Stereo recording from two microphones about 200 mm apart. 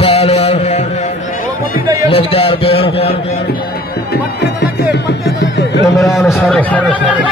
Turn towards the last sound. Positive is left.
turn(degrees=5)  # may be behind; listen again after turning